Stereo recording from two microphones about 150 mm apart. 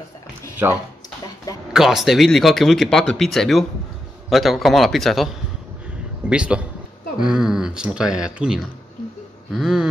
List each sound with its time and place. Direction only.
0.6 s a man's voice: 10° right (ahead or behind)